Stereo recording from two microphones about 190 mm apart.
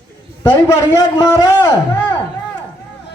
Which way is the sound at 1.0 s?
20° left (ahead or behind).